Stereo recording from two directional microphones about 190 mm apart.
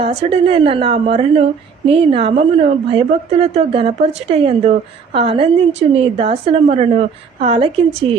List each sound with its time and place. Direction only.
0.0 s a woman's voice: 30° right (ahead or behind)